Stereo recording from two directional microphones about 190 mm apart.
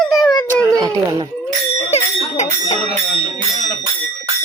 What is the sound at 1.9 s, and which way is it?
Bell, 35° left (ahead or behind).